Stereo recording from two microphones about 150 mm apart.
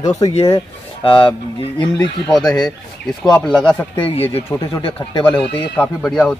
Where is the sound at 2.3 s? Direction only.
5° left (ahead or behind).